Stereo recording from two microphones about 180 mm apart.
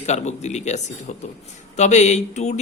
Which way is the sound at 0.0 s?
40° left (ahead or behind).